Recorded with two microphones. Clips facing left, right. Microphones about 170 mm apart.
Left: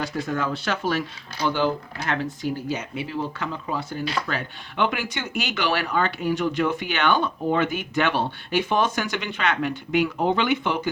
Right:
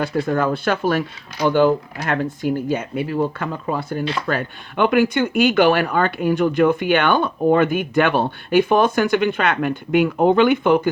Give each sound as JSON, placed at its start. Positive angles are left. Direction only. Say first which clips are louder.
{"t": 0.0, "sound": "speech", "louder": "right 7 dB", "side_deg": -55}